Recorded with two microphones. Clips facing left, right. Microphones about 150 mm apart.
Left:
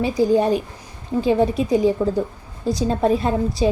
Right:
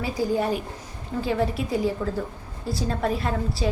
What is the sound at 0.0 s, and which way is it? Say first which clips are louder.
A woman's voice: left 7 dB; 20° left (ahead or behind).